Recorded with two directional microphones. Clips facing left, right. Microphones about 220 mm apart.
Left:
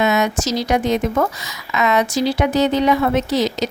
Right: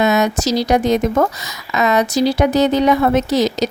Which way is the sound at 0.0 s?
40° right (ahead or behind).